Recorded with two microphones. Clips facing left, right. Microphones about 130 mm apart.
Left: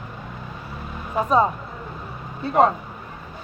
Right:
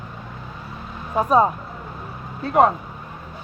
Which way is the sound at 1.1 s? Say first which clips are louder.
Right 2 dB; 5° right (ahead or behind).